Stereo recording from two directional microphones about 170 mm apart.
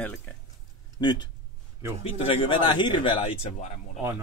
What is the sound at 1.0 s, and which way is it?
Speech, 25° left (ahead or behind).